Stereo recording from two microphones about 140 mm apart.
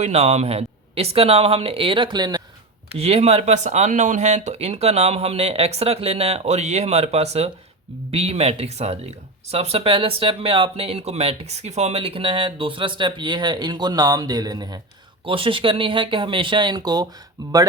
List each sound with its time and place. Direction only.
0.0 s speech: 50° right (ahead or behind); by 2.4 s 30° right (ahead or behind)
2.9 s speech: 45° right (ahead or behind); by 17.1 s 30° right (ahead or behind)